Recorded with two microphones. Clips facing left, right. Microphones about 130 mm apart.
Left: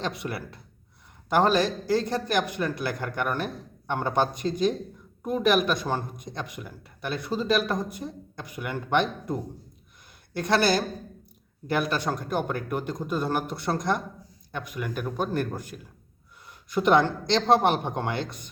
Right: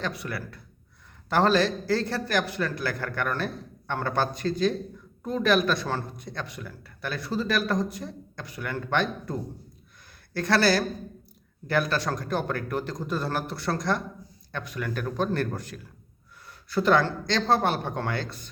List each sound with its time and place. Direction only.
0.0 s a man's voice: 25° left (ahead or behind)